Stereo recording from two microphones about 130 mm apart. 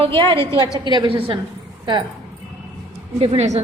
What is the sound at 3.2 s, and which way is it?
Speech, 60° right (ahead or behind).